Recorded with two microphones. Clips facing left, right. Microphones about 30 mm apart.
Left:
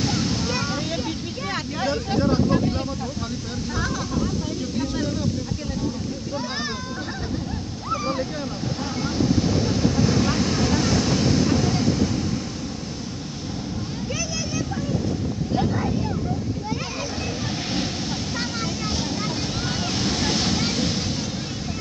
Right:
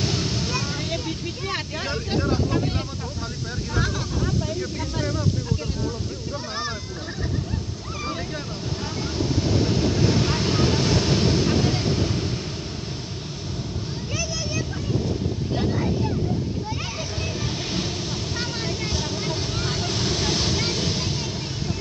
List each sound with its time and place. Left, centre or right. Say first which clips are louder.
0.0 s boat: left 2 dB; centre
1.8 s vehicle: left 5 dB; centre
9.2 s vehicle: left 2 dB; centre; by 12.3 s right
15.5 s wind noise: left 2 dB; centre
19.9 s waves: left 2 dB; centre